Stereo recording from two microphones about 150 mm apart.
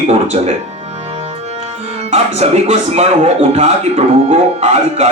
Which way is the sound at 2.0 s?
45° right (ahead or behind).